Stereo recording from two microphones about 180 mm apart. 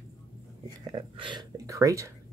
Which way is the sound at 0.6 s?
25° right (ahead or behind).